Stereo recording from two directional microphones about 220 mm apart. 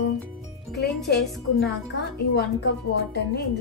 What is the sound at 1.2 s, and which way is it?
Speech, centre (ahead or behind).